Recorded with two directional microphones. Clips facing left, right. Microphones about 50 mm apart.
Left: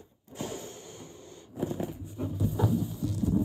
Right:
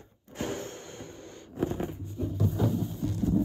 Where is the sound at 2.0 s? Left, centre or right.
Centre.